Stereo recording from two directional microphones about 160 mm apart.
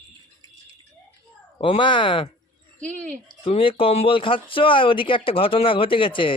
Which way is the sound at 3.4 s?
35° left (ahead or behind).